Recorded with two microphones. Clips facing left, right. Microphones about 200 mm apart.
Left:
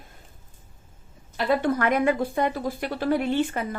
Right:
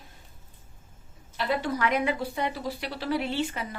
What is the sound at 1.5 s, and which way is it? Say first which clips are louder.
A woman's voice: left 5 dB; 50° left (ahead or behind).